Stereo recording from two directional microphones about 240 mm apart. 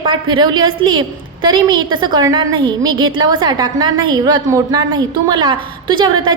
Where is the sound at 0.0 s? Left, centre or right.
Centre.